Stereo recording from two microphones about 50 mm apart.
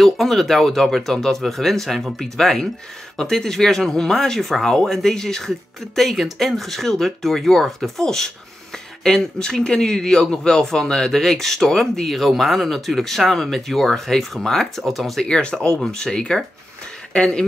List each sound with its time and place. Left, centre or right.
0.0 s speech: centre
15.2 s speech: centre